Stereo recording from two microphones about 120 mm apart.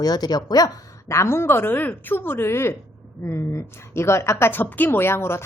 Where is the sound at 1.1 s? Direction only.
20° left (ahead or behind).